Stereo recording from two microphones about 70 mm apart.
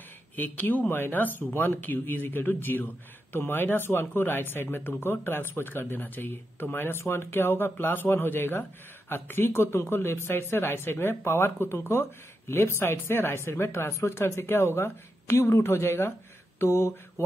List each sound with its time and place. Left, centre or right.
0.4 s speech: left
16.5 s mantra: left